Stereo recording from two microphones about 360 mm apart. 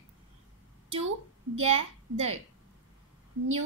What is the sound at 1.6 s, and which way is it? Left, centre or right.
Speech, centre.